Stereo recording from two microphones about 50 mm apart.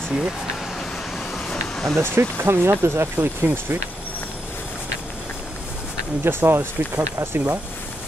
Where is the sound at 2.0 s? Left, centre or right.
Right.